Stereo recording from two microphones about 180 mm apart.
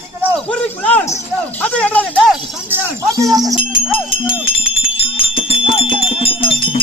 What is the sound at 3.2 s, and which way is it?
Speech, 20° right (ahead or behind).